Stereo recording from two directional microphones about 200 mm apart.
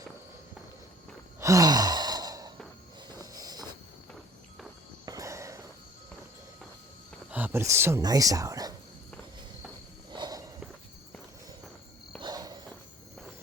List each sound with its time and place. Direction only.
1.4 s sigh: 15° right (ahead or behind)
3.1 s a sound: 20° right (ahead or behind)
5.0 s walk: 15° right (ahead or behind)
7.3 s speech: 10° right (ahead or behind)
10.1 s walk: 20° right (ahead or behind)
12.2 s walk: 20° right (ahead or behind)